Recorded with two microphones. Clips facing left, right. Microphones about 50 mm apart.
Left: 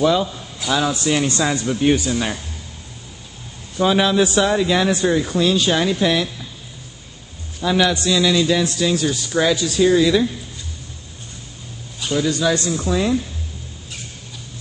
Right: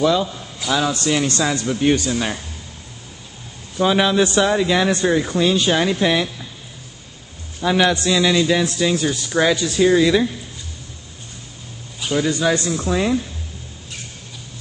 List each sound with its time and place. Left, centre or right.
0.0 s a man's voice: centre
0.9 s a man's voice: centre
1.7 s a man's voice: centre
3.7 s a man's voice: centre
7.6 s speech: centre
8.1 s music: centre
8.7 s speech: centre
12.3 s speech: centre
12.9 s music: right